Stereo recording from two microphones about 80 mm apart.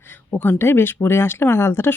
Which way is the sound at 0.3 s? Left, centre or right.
Left.